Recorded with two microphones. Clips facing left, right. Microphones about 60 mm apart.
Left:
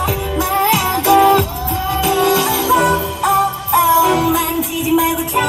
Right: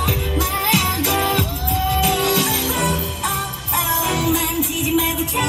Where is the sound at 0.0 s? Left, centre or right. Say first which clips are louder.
Left 4 dB; left.